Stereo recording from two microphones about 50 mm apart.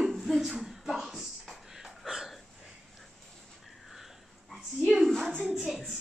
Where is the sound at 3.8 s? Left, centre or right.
Centre.